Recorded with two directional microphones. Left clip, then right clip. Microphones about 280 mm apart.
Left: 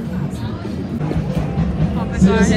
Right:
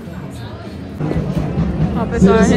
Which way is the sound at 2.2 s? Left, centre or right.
Right.